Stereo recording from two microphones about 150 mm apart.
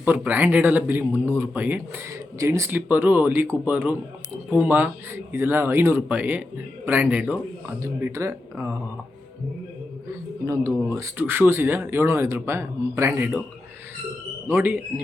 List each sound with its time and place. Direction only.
0.0 s speech: 10° right (ahead or behind)
10.4 s speech: 20° right (ahead or behind)
14.4 s speech: 15° right (ahead or behind)